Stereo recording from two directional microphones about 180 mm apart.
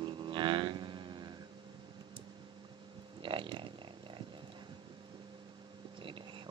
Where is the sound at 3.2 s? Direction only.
25° right (ahead or behind).